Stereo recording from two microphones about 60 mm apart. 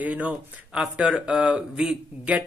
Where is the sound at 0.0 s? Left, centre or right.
Right.